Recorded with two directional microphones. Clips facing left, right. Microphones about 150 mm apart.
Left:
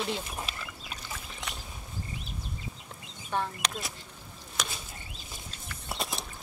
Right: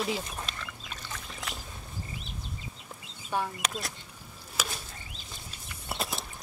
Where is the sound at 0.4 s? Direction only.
10° left (ahead or behind).